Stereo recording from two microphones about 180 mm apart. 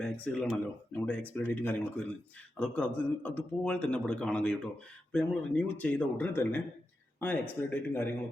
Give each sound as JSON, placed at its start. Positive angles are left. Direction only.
{"t": 0.0, "sound": "a man's voice", "side_deg": 5}